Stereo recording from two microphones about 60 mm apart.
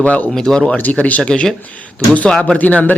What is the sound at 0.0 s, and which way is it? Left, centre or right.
Speech, left.